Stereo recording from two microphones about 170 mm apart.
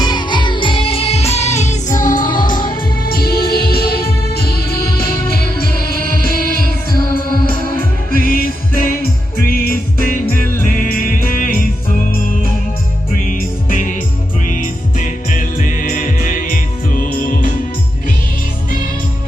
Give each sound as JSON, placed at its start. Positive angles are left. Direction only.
{"t": 0.0, "sound": "music", "side_deg": 25}
{"t": 2.4, "sound": "music", "side_deg": 25}
{"t": 3.1, "sound": "music", "side_deg": 65}
{"t": 5.9, "sound": "music", "side_deg": 60}
{"t": 8.1, "sound": "music", "side_deg": 55}
{"t": 13.3, "sound": "music", "side_deg": 50}